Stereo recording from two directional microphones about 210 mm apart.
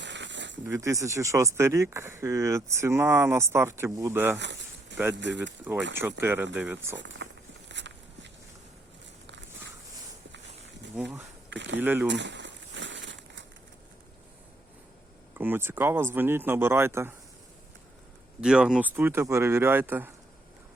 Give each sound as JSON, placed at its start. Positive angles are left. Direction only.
{"t": 0.0, "sound": "a sound", "side_deg": -60}
{"t": 0.7, "sound": "speech", "side_deg": -15}
{"t": 4.4, "sound": "a sound", "side_deg": -55}
{"t": 5.1, "sound": "speech", "side_deg": -60}
{"t": 6.0, "sound": "speech", "side_deg": -10}
{"t": 6.9, "sound": "speech", "side_deg": -60}
{"t": 7.7, "sound": "walk", "side_deg": -55}
{"t": 11.5, "sound": "speech", "side_deg": -60}
{"t": 11.8, "sound": "speech", "side_deg": -10}
{"t": 12.0, "sound": "crumpling", "side_deg": -55}
{"t": 15.4, "sound": "speech", "side_deg": -10}
{"t": 18.3, "sound": "speech", "side_deg": -5}